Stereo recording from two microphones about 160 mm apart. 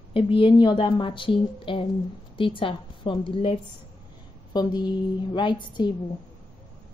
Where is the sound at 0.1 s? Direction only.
35° left (ahead or behind).